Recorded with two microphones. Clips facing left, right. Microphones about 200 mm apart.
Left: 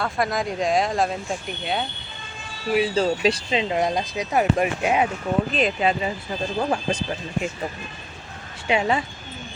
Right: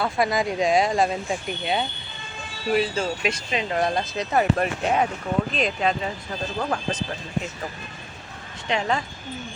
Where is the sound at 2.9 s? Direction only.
35° left (ahead or behind); by 7.0 s 10° left (ahead or behind).